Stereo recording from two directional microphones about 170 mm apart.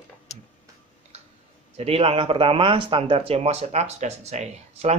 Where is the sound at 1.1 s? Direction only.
40° right (ahead or behind).